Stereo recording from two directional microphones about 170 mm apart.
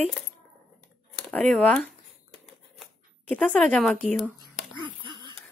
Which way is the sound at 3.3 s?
5° left (ahead or behind).